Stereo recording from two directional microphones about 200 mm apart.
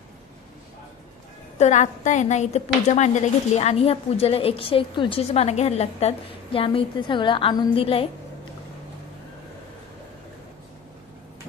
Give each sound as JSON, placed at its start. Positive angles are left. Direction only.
{"t": 1.6, "sound": "a woman's voice", "side_deg": 35}